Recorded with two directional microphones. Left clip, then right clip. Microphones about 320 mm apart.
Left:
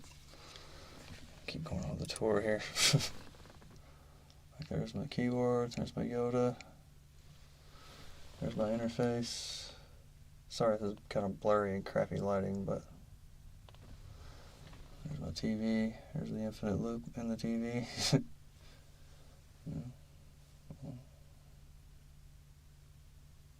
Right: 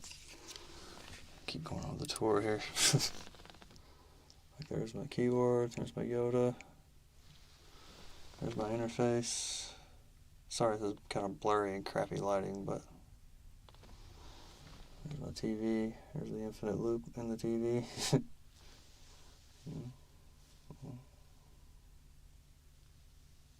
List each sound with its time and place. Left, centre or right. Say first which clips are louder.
1.5 s speech: even; centre
4.6 s speech: even; centre
8.4 s speech: left 2 dB; centre
15.3 s speech: right 1 dB; centre